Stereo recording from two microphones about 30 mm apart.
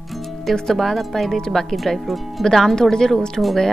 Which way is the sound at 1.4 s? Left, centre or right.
Centre.